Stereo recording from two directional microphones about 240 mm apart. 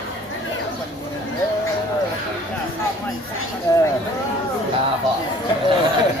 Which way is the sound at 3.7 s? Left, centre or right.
Centre.